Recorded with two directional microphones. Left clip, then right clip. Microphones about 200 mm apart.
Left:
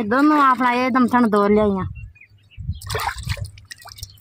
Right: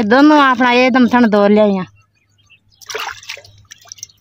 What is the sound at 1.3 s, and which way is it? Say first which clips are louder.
Speech: right 6 dB; 45° right (ahead or behind).